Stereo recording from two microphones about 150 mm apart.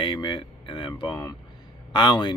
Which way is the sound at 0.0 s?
35° left (ahead or behind).